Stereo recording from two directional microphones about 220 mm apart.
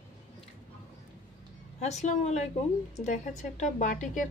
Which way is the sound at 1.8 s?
30° left (ahead or behind).